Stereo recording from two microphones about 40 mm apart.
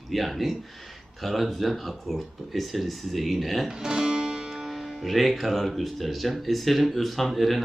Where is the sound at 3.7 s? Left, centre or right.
Centre.